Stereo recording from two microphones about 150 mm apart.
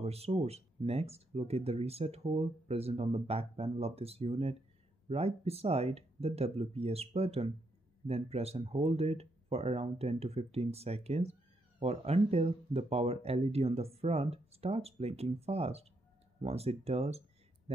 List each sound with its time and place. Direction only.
0.0 s speech: 45° right (ahead or behind)